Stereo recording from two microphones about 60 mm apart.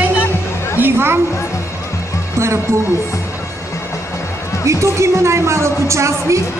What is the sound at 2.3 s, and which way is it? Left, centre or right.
Speech, right.